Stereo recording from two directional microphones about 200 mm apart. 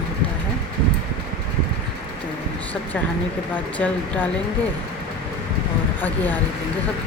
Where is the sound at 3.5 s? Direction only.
10° left (ahead or behind).